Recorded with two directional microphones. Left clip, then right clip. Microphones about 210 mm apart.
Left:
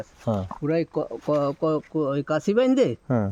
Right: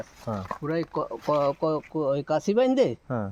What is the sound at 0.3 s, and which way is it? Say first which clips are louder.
Speech: left 5 dB; 40° left (ahead or behind).